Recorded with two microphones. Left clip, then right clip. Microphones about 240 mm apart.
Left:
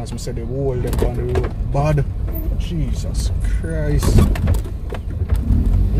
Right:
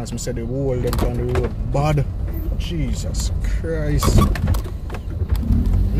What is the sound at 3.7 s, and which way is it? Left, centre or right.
Speech, right.